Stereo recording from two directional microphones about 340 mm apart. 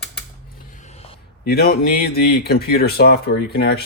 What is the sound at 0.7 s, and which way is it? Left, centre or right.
Speech, centre.